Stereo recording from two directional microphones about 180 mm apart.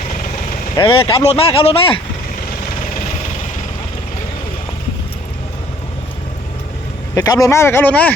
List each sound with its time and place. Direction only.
0.8 s speech: 30° left (ahead or behind)
7.2 s speech: 20° left (ahead or behind)